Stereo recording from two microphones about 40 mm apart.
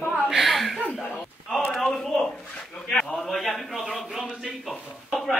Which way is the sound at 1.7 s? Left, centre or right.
Centre.